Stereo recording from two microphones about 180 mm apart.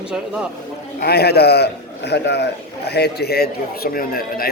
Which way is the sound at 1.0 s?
60° left (ahead or behind).